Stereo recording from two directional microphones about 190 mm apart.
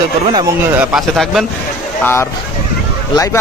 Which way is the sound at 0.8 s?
Centre (ahead or behind).